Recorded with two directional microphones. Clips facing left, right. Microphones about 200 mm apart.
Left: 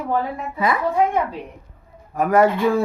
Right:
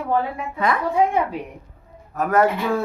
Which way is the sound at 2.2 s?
10° left (ahead or behind).